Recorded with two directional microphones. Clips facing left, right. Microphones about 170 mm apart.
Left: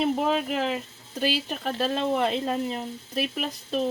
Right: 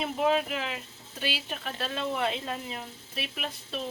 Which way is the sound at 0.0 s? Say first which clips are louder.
Left 2 dB; 45° left (ahead or behind).